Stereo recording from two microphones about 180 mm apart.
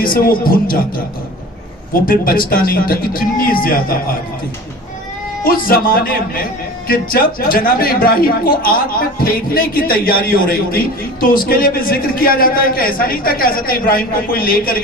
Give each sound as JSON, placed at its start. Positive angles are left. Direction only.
{"t": 0.0, "sound": "a man's voice", "side_deg": 55}
{"t": 5.4, "sound": "a man's voice", "side_deg": 55}